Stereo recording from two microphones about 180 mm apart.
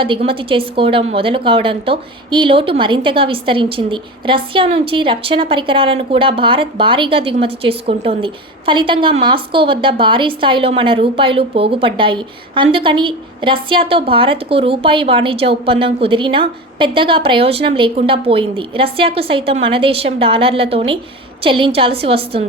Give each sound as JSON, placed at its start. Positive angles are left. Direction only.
{"t": 0.0, "sound": "a woman's voice", "side_deg": -30}